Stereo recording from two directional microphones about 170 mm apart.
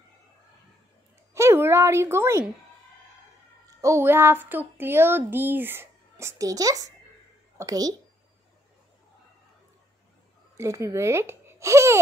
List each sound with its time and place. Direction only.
1.3 s speech: 15° right (ahead or behind)
3.8 s speech: 15° right (ahead or behind)
10.6 s speech: 15° right (ahead or behind)